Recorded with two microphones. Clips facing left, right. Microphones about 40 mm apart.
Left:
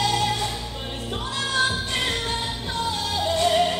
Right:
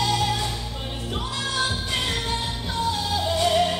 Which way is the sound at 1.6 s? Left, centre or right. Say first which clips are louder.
Left 3 dB; centre.